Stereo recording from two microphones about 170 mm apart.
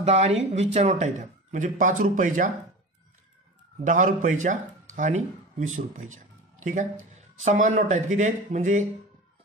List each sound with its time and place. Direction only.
0.0 s speech: 40° right (ahead or behind)
3.8 s speech: 50° right (ahead or behind)